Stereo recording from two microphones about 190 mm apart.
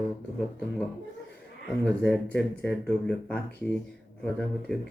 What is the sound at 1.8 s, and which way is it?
Speech, 5° left (ahead or behind).